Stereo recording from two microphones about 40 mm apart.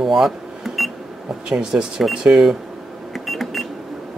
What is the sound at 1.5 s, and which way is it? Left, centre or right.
Speech, right.